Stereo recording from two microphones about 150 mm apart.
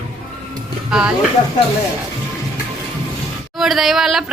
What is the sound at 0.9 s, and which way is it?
Speech, 5° right (ahead or behind).